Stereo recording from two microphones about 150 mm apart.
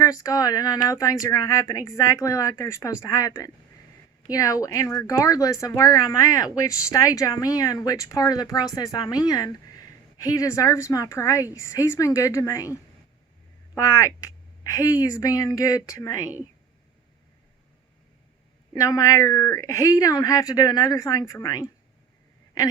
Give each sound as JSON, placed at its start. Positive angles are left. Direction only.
{"t": 0.0, "sound": "speech", "side_deg": 25}
{"t": 18.7, "sound": "speech", "side_deg": 25}